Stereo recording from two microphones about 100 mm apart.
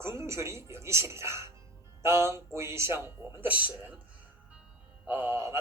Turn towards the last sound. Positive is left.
turn(degrees=-25)  # may be behind; listen again after turning